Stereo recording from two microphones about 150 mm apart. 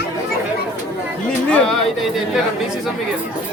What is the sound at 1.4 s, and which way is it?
Chatter, 5° left (ahead or behind).